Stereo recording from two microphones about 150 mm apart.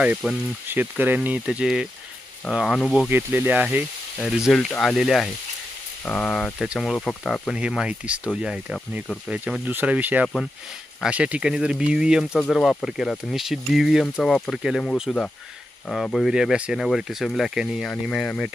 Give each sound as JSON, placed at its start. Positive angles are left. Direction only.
{"t": 0.2, "sound": "speech", "side_deg": -5}
{"t": 3.1, "sound": "speech", "side_deg": -15}